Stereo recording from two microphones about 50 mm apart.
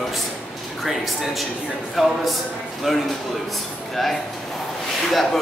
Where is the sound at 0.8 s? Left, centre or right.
Centre.